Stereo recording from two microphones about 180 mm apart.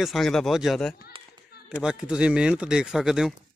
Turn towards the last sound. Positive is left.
turn(degrees=0)  # may be behind; listen again after turning